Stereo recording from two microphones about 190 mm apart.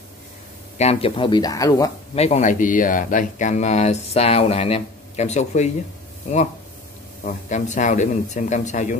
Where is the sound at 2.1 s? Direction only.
35° left (ahead or behind).